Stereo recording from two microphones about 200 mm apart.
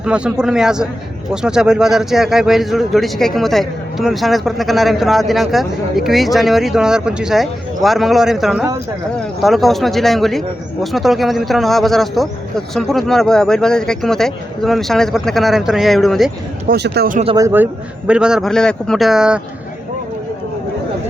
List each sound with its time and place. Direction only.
0.0 s a man's voice: 5° right (ahead or behind)
16.6 s a man's voice: 55° right (ahead or behind)
17.3 s a man's voice: 15° right (ahead or behind)